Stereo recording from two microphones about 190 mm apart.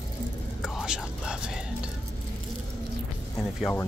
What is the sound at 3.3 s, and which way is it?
Music, 10° left (ahead or behind).